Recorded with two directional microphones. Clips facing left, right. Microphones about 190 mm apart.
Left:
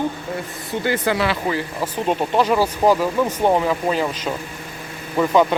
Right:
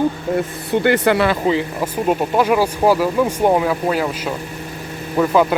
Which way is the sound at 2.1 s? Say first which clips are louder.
Right 2 dB; 10° right (ahead or behind).